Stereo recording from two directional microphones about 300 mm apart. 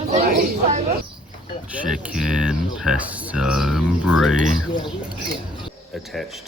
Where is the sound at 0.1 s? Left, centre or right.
Right.